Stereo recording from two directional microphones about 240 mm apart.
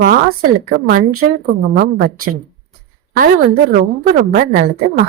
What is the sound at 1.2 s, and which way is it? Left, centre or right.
A woman's voice, right.